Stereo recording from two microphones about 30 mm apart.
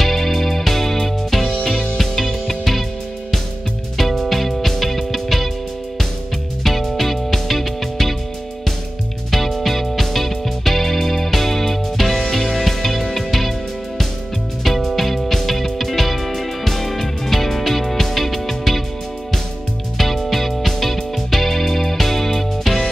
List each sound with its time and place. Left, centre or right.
0.0 s music: centre
2.0 s music: centre
3.9 s music: centre
6.6 s music: centre
9.3 s music: centre
14.6 s music: centre
20.0 s music: centre